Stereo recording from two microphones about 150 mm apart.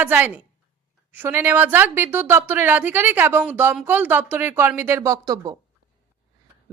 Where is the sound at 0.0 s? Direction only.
10° right (ahead or behind).